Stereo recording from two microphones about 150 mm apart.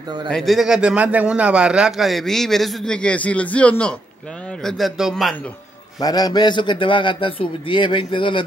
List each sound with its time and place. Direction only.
0.3 s a man's voice: centre (ahead or behind)
5.9 s a man's voice: 25° left (ahead or behind)